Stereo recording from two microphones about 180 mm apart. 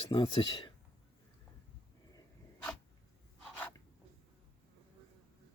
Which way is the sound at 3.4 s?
10° left (ahead or behind).